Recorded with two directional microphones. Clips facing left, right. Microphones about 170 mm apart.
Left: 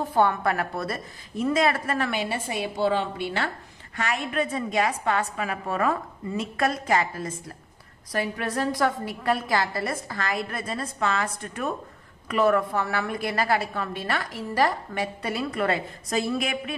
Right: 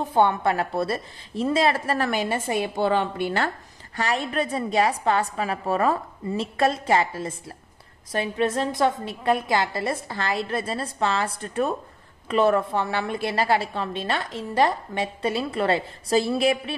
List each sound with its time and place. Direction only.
0.0 s a woman's voice: 25° right (ahead or behind)